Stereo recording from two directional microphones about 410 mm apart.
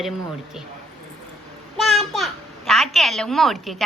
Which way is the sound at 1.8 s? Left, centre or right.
Centre.